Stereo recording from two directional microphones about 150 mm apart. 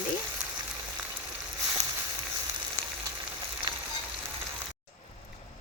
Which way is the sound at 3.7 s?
35° right (ahead or behind).